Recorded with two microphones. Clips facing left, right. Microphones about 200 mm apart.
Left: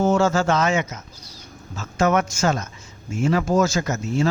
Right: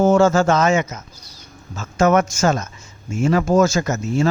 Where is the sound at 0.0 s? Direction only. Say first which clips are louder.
Right 5 dB; 50° right (ahead or behind).